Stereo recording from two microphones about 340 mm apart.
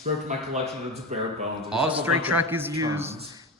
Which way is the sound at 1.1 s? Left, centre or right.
Centre.